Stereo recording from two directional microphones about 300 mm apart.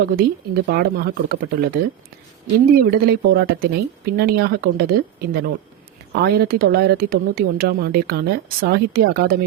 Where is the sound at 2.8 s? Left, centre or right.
Right.